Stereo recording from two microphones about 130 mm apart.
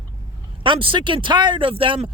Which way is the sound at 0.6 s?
40° right (ahead or behind).